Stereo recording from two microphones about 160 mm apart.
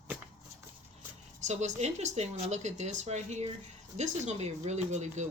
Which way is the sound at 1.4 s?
45° right (ahead or behind).